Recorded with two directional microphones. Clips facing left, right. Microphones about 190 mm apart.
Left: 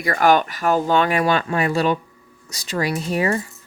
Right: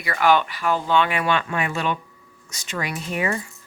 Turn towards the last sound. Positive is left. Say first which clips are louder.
# left 5 dB
turn(degrees=35)  # may be behind; listen again after turning